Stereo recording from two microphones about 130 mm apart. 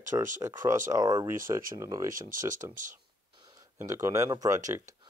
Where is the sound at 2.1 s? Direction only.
90° right.